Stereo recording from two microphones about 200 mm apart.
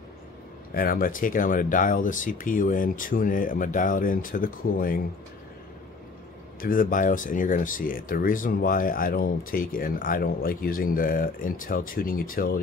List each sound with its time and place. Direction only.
0.7 s speech: 45° left (ahead or behind)
6.6 s speech: 45° left (ahead or behind)